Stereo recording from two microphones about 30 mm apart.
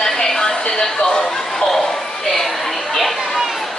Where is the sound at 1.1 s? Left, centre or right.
Centre.